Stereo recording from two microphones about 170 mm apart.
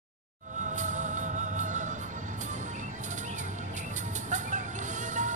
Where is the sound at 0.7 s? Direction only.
45° right (ahead or behind).